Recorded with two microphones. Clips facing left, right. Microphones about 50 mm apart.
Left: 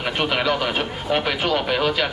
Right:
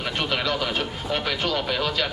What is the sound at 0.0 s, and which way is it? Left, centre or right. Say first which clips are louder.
Speech: left 4 dB; centre.